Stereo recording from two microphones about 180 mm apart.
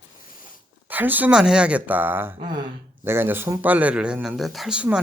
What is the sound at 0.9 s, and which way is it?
Speech, 10° right (ahead or behind).